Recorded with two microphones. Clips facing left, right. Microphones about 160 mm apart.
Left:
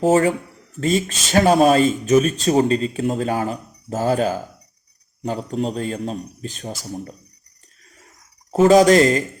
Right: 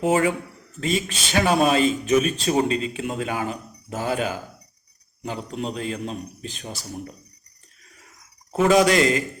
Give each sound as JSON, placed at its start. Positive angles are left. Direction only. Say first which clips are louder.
{"t": 0.0, "sound": "speech", "louder": "left 4 dB", "side_deg": 35}
{"t": 8.5, "sound": "speech", "louder": "left 5 dB", "side_deg": 40}